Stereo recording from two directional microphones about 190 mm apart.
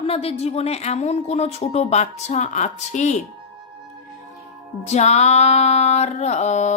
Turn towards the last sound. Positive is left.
turn(degrees=35)  # may be behind; listen again after turning